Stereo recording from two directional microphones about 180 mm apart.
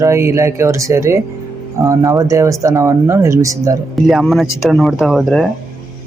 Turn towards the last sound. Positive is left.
turn(degrees=0)  # may be behind; listen again after turning